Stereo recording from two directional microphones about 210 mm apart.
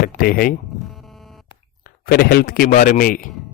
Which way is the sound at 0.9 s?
Centre (ahead or behind).